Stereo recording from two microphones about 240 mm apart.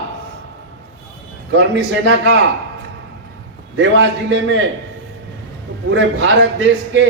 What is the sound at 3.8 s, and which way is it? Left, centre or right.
Speech, right.